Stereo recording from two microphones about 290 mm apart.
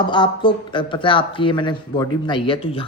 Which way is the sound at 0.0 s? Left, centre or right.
Centre.